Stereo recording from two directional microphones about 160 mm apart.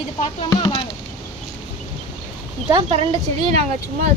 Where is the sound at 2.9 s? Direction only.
40° right (ahead or behind).